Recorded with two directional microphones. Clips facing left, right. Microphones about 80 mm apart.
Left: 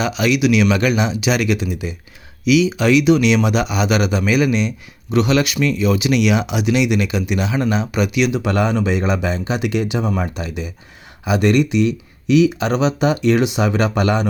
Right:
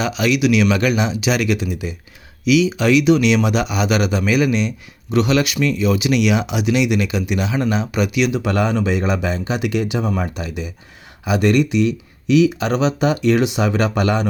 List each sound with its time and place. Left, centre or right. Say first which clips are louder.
0.0 s speech: left 1 dB; left